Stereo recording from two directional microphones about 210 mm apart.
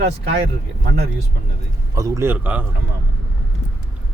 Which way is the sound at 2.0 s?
15° right (ahead or behind).